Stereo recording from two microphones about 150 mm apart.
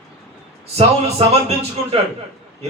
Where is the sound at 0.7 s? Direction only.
45° right (ahead or behind).